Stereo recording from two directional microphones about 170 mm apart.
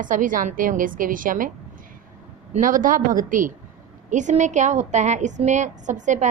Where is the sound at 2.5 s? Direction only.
50° right (ahead or behind).